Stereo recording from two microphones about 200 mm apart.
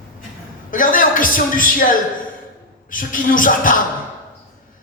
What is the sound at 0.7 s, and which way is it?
A man's voice, 40° left (ahead or behind).